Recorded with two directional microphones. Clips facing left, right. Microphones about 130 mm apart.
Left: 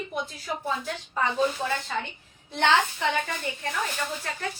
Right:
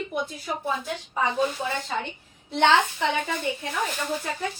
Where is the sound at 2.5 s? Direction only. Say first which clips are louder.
Right 3 dB; 15° right (ahead or behind).